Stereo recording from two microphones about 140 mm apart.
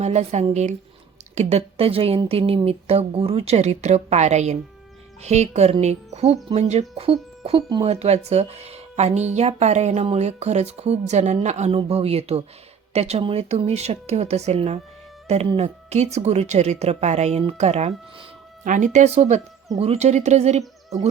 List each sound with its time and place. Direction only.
0.0 s speech: 50° right (ahead or behind)
18.6 s speech: 65° right (ahead or behind)